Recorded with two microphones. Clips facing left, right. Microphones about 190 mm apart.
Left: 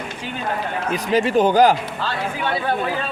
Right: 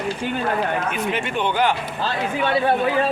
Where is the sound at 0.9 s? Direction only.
35° left (ahead or behind).